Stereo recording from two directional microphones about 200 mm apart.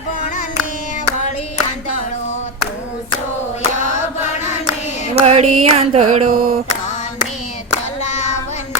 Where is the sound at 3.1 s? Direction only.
30° left (ahead or behind).